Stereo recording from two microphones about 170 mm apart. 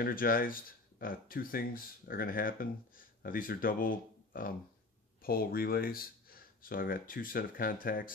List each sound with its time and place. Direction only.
0.0 s speech: 55° left (ahead or behind)